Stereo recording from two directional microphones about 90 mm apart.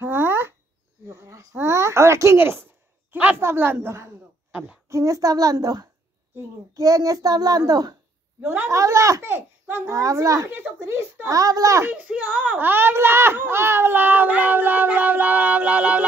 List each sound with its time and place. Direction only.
0.0 s a sound: 25° right (ahead or behind)
3.4 s a woman's voice: 25° right (ahead or behind)
4.5 s speech: 15° right (ahead or behind)
4.8 s a woman's voice: 35° right (ahead or behind)
8.4 s speech: 20° right (ahead or behind)
8.6 s a woman's voice: 35° right (ahead or behind)
9.2 s a child's voice: 25° right (ahead or behind)
9.9 s a woman's voice: 35° right (ahead or behind)
10.5 s speech: 25° right (ahead or behind)
11.2 s a woman's voice: 40° right (ahead or behind)
11.9 s speech: 15° right (ahead or behind)